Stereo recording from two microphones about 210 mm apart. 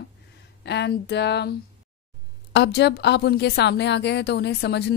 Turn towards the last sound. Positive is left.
turn(degrees=55)  # may be behind; listen again after turning